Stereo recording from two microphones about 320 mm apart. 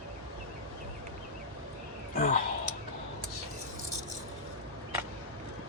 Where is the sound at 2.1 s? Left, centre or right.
Left.